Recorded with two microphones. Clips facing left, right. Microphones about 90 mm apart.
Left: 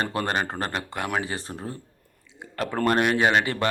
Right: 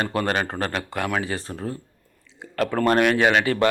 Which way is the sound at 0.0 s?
30° left (ahead or behind).